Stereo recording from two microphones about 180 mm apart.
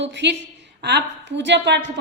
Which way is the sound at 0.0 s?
75° right (ahead or behind).